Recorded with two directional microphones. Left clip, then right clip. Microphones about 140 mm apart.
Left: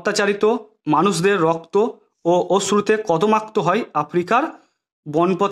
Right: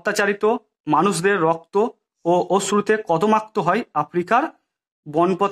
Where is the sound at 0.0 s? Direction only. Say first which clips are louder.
Left 1 dB; 30° left (ahead or behind).